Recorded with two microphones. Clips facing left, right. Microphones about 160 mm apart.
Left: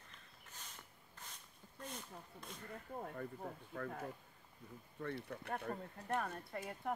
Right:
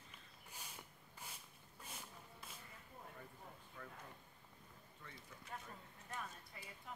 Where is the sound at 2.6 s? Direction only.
60° left (ahead or behind).